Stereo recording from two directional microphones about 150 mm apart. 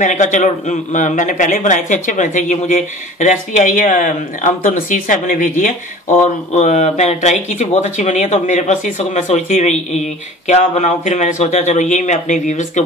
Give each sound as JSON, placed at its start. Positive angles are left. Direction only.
{"t": 0.0, "sound": "a man's voice", "side_deg": 55}
{"t": 6.5, "sound": "speech", "side_deg": 50}